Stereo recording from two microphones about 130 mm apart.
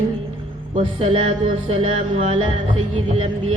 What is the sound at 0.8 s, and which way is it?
Mantra, 50° right (ahead or behind).